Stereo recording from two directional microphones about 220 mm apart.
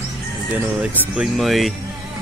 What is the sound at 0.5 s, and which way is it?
Speech, 5° right (ahead or behind).